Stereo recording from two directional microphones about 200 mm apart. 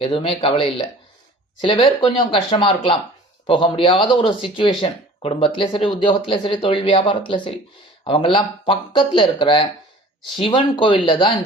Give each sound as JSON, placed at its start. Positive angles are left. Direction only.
{"t": 0.0, "sound": "speech", "side_deg": 25}